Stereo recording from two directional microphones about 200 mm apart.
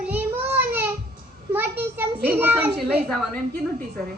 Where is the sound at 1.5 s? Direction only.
10° right (ahead or behind).